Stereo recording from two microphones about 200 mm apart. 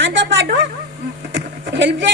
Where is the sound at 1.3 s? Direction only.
65° right (ahead or behind).